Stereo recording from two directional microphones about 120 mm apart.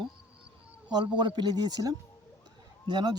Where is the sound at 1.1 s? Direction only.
35° right (ahead or behind).